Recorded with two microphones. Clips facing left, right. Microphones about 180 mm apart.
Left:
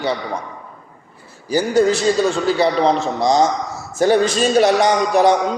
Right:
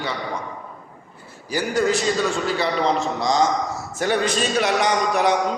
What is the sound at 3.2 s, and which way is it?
A man's voice, 30° left (ahead or behind).